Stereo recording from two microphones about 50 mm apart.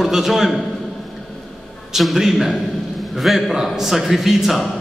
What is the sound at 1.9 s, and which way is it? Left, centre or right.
A man's voice, centre.